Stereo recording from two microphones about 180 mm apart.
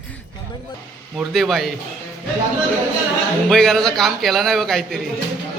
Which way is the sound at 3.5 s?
Centre (ahead or behind).